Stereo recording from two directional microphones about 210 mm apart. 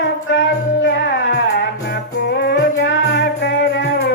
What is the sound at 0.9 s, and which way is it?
Music, 50° left (ahead or behind).